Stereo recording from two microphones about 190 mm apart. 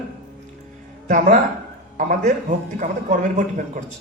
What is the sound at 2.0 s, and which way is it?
A man's voice, 45° right (ahead or behind).